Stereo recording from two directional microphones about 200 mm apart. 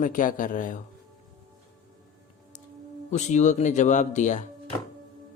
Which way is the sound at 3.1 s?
35° left (ahead or behind).